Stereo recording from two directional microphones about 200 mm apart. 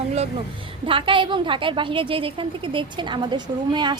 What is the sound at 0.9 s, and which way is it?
A woman's voice, 25° right (ahead or behind).